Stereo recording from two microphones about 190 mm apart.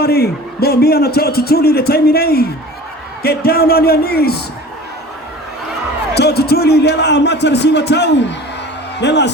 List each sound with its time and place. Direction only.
0.0 s a man's voice: 55° left (ahead or behind)
6.1 s a man's voice: 60° left (ahead or behind)